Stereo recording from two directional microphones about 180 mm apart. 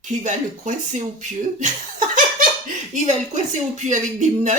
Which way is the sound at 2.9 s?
40° right (ahead or behind).